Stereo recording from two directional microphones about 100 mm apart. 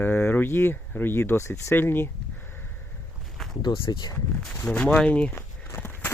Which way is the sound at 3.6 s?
55° left (ahead or behind).